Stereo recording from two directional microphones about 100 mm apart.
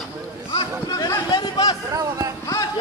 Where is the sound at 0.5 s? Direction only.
45° left (ahead or behind).